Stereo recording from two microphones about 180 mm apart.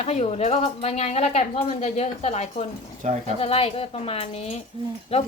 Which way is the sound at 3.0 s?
40° right (ahead or behind).